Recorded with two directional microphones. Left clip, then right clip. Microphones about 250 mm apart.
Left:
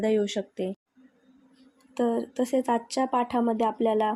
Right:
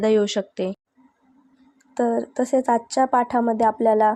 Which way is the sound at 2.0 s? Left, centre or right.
Centre.